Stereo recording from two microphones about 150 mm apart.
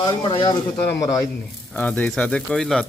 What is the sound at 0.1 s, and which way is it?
Speech, 35° left (ahead or behind).